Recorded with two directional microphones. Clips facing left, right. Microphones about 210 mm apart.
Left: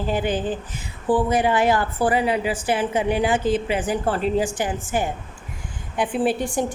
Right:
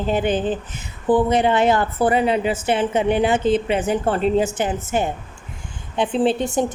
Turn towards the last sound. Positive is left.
turn(degrees=-20)  # may be behind; listen again after turning